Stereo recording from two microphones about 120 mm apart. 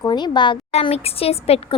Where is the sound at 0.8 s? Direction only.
55° left (ahead or behind).